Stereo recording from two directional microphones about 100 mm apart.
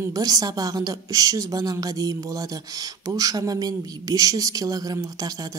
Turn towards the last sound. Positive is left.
turn(degrees=-40)  # may be behind; listen again after turning